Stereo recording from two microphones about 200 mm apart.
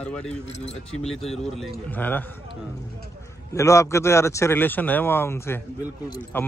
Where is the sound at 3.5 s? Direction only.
15° left (ahead or behind).